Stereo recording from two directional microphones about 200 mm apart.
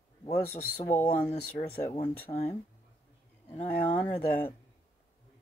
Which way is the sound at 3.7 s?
35° left (ahead or behind).